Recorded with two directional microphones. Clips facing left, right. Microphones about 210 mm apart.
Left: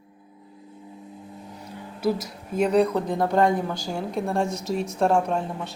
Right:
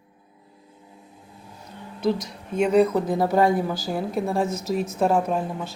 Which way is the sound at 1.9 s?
5° left (ahead or behind).